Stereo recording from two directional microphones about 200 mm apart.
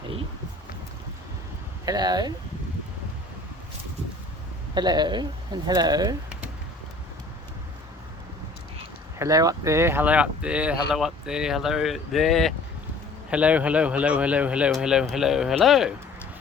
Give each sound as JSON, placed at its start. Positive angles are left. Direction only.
{"t": 1.8, "sound": "speech", "side_deg": -20}
{"t": 4.7, "sound": "speech", "side_deg": -20}
{"t": 9.1, "sound": "speech", "side_deg": -15}